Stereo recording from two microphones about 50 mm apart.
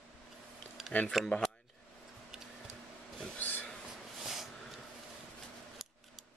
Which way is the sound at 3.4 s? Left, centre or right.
Left.